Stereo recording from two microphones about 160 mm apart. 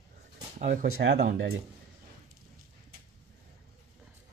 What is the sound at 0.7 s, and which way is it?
Speech, 75° right (ahead or behind).